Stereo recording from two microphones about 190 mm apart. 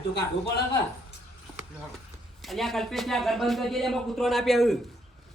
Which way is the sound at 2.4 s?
Centre (ahead or behind).